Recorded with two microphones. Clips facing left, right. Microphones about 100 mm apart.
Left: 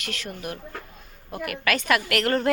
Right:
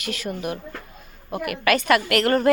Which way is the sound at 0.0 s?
10° right (ahead or behind).